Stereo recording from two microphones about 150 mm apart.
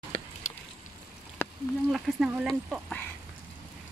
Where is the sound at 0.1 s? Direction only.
55° left (ahead or behind).